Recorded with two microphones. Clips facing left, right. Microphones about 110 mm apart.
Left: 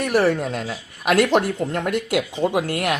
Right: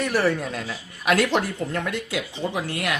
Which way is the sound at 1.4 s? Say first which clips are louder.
Left 4 dB; 30° left (ahead or behind).